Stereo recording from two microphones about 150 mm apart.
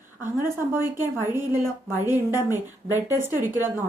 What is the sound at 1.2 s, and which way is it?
A woman's voice, 15° right (ahead or behind).